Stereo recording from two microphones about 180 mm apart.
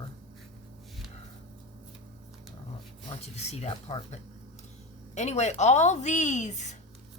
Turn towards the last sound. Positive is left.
turn(degrees=40)  # may be behind; listen again after turning